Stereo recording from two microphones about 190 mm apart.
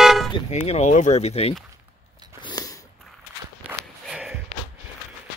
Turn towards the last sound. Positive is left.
turn(degrees=0)  # may be behind; listen again after turning